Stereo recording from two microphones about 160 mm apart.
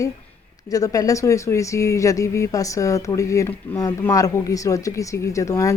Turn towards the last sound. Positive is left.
turn(degrees=20)  # may be behind; listen again after turning